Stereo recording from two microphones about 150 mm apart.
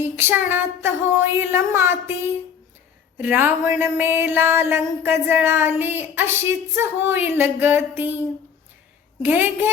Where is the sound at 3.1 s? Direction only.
15° right (ahead or behind).